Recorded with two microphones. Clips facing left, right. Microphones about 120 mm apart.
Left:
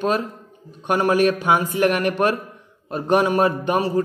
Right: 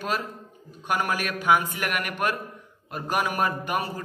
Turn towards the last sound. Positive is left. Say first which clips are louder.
# left 7 dB
turn(degrees=30)  # may be behind; listen again after turning